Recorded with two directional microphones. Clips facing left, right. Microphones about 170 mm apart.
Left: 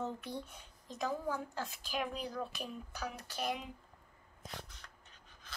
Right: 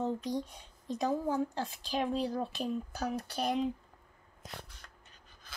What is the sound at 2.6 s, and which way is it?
Speech, 40° right (ahead or behind).